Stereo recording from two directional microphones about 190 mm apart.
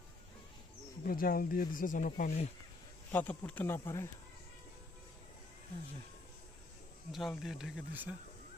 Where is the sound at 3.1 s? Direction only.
10° left (ahead or behind).